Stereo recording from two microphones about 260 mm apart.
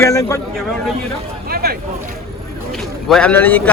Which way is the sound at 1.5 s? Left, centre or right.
Right.